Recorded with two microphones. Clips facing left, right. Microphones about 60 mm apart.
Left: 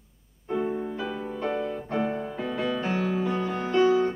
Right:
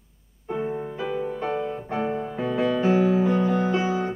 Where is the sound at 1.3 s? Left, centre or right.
Centre.